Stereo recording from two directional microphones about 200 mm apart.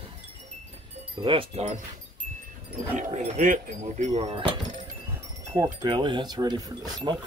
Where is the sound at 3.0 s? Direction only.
40° right (ahead or behind).